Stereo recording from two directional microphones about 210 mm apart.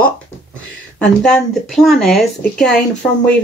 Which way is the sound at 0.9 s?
Centre (ahead or behind).